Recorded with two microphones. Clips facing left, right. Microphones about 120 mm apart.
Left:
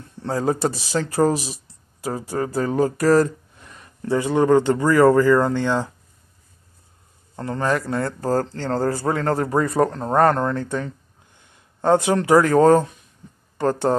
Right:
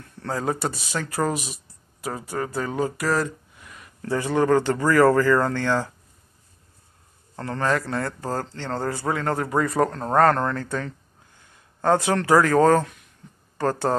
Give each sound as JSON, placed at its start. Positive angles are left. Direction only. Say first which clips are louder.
{"t": 0.2, "sound": "speech", "louder": "left 5 dB", "side_deg": 25}
{"t": 4.0, "sound": "speech", "louder": "left 3 dB", "side_deg": 20}
{"t": 7.3, "sound": "speech", "louder": "left 2 dB", "side_deg": 20}